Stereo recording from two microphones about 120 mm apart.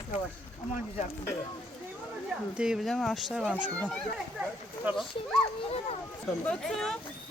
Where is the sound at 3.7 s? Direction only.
10° left (ahead or behind).